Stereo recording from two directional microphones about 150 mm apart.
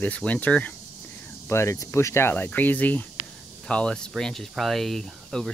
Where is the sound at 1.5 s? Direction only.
20° left (ahead or behind).